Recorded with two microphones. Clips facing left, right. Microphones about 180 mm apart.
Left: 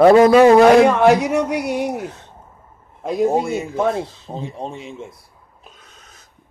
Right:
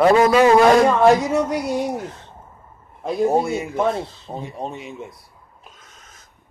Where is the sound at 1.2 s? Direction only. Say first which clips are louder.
Left 1 dB; 65° left (ahead or behind).